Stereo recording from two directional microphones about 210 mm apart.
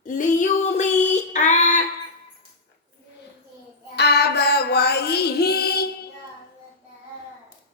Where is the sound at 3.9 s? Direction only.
50° left (ahead or behind).